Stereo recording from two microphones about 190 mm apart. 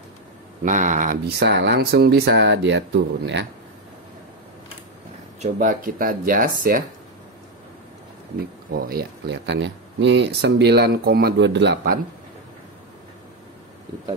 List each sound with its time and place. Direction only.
0.7 s speech: 40° right (ahead or behind)
1.4 s speech: 65° right (ahead or behind)
5.4 s speech: 45° right (ahead or behind)
8.7 s speech: 50° right (ahead or behind)